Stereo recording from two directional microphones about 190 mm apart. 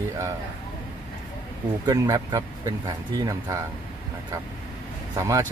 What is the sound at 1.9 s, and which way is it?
Speech, 20° right (ahead or behind).